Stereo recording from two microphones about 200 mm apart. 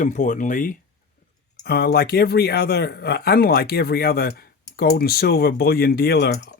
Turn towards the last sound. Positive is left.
turn(degrees=55)  # may be behind; listen again after turning